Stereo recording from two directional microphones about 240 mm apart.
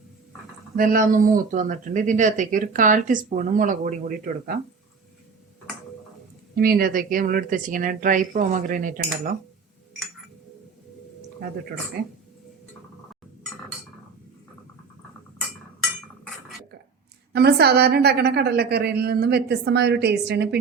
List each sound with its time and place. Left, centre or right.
0.8 s speech: right
6.6 s speech: right
12.0 s speech: right
17.3 s a woman's voice: right